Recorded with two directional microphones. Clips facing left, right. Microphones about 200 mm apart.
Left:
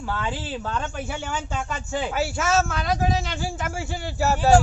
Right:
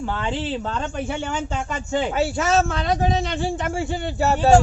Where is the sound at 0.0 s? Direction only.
20° right (ahead or behind).